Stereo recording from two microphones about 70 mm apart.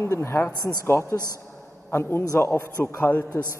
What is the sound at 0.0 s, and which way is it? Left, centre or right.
A man's voice, left.